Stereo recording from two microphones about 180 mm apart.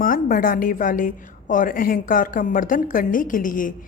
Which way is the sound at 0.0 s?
50° left (ahead or behind).